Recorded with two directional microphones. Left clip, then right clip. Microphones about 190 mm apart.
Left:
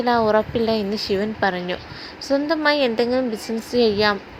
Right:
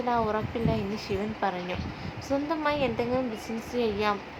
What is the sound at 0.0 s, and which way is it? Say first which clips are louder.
A woman's voice: left 9 dB; 35° left (ahead or behind).